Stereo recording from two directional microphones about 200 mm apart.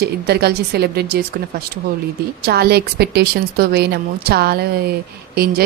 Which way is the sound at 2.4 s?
50° right (ahead or behind).